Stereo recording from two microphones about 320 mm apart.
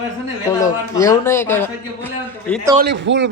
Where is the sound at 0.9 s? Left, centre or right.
Centre.